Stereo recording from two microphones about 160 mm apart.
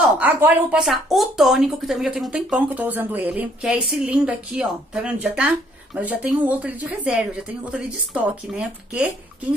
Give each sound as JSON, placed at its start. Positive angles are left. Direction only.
{"t": 0.2, "sound": "speech", "side_deg": -10}